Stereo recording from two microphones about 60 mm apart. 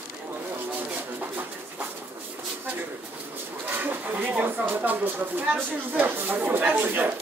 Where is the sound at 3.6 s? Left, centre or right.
Right.